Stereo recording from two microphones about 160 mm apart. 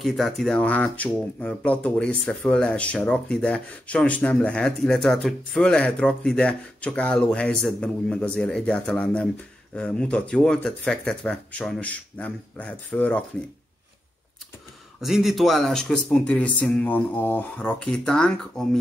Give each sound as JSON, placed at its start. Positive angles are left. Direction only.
{"t": 0.0, "sound": "speech", "side_deg": 0}
{"t": 15.0, "sound": "speech", "side_deg": 0}